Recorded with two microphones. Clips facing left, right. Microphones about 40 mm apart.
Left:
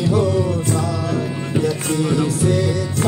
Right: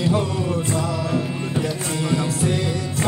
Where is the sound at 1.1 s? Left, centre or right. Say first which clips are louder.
Left 2 dB; centre.